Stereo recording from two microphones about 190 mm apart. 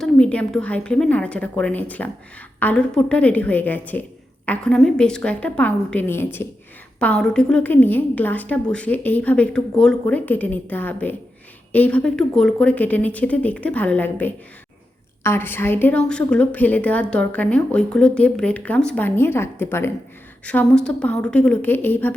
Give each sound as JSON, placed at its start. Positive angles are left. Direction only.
{"t": 0.0, "sound": "a woman's voice", "side_deg": 5}